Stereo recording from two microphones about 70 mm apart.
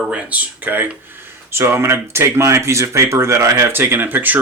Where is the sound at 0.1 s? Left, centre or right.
Right.